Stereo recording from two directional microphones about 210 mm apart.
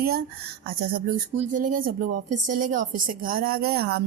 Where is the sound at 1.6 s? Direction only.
40° right (ahead or behind).